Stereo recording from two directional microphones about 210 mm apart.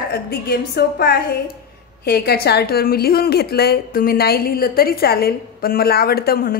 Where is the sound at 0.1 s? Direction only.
50° left (ahead or behind).